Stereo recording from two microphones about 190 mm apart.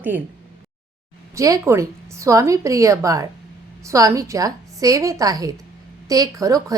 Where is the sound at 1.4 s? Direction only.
15° right (ahead or behind).